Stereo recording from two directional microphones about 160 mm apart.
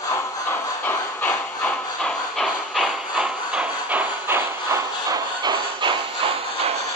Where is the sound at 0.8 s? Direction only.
5° left (ahead or behind); by 5.9 s 25° right (ahead or behind).